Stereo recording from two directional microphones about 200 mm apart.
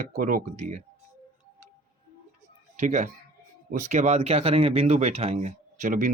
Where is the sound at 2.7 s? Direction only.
35° right (ahead or behind).